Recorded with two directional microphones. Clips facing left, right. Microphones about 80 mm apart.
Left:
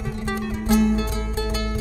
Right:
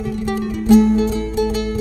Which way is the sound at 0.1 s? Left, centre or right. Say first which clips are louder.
Right 4 dB; left.